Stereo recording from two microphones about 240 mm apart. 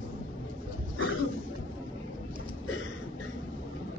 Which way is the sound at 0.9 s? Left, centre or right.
Left.